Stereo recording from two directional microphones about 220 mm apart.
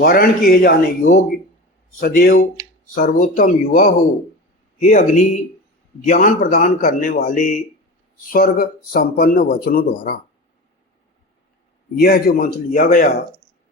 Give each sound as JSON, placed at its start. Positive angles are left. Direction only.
{"t": 0.0, "sound": "speech", "side_deg": 45}
{"t": 11.9, "sound": "speech", "side_deg": 40}